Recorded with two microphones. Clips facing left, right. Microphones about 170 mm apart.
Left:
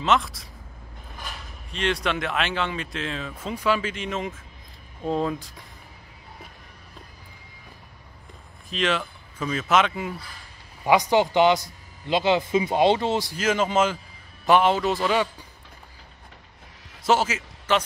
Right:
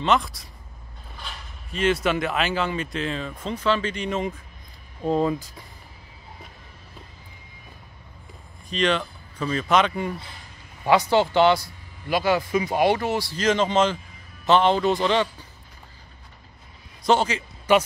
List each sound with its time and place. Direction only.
0.0 s speech: centre (ahead or behind)
1.7 s speech: centre (ahead or behind)
8.6 s speech: 5° left (ahead or behind)
10.9 s speech: 15° left (ahead or behind)
13.4 s a man's voice: 5° left (ahead or behind)
17.0 s speech: 5° left (ahead or behind)
17.7 s speech: 10° right (ahead or behind)